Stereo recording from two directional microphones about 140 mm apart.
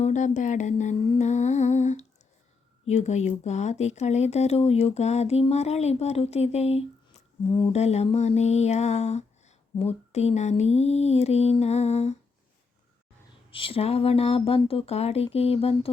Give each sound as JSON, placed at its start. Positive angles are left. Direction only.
{"t": 0.0, "sound": "speech", "side_deg": 60}
{"t": 7.4, "sound": "speech", "side_deg": 30}
{"t": 7.7, "sound": "speech", "side_deg": 50}
{"t": 13.5, "sound": "speech", "side_deg": 40}